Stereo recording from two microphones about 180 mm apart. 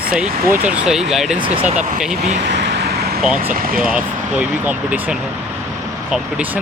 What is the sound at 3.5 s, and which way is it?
Speech, 55° right (ahead or behind).